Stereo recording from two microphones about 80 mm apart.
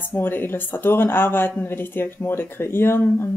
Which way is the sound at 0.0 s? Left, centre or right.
Left.